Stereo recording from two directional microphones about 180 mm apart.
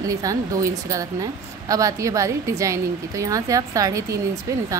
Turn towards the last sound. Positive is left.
turn(degrees=-15)  # may be behind; listen again after turning